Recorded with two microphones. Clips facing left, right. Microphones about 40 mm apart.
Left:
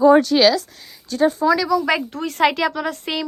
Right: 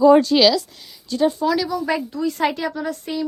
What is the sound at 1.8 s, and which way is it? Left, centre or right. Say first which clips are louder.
Speech: left 1 dB; left.